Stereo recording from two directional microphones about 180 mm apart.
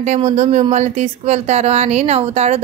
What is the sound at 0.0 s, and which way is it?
Speech, 40° right (ahead or behind).